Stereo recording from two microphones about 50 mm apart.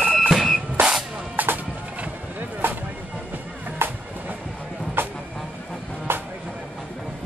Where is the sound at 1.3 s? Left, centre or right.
Right.